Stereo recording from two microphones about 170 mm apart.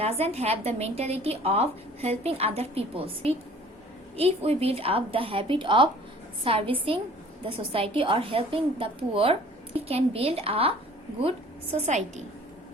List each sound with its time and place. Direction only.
0.0 s a woman's voice: 35° right (ahead or behind)